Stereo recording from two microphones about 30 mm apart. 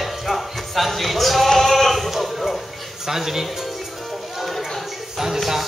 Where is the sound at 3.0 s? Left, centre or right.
Centre.